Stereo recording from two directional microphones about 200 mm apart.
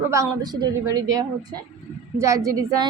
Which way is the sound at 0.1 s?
20° right (ahead or behind).